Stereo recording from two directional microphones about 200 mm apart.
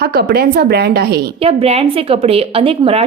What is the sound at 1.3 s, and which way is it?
A woman's voice, 30° right (ahead or behind).